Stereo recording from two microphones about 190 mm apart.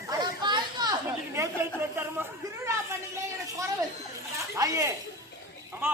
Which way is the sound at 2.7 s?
15° right (ahead or behind).